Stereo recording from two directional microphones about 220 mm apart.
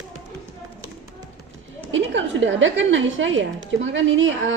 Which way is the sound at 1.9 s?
60° right (ahead or behind).